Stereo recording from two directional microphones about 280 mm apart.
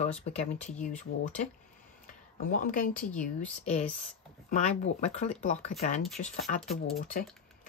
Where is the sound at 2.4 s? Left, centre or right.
Left.